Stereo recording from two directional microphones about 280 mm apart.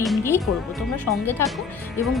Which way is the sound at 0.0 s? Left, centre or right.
Centre.